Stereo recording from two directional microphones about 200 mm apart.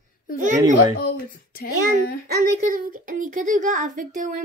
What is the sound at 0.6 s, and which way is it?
Speech, 20° right (ahead or behind).